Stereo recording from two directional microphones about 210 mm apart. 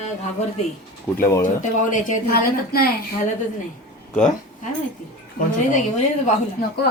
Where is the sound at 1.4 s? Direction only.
40° left (ahead or behind).